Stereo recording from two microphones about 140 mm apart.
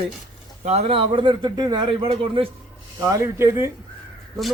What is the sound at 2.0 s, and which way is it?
Speech, 40° right (ahead or behind).